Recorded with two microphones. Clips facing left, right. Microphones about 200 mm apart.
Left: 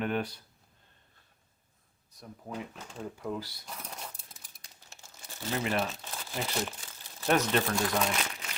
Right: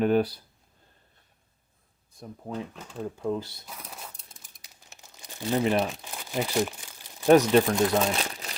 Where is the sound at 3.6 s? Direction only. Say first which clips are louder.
Even; 5° right (ahead or behind).